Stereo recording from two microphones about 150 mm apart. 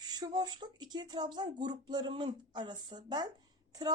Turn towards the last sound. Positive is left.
turn(degrees=-25)  # may be behind; listen again after turning